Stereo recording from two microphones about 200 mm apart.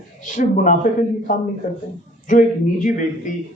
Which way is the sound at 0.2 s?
40° left (ahead or behind).